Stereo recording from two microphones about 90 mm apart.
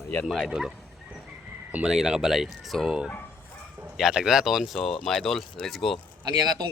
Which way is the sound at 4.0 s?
5° right (ahead or behind).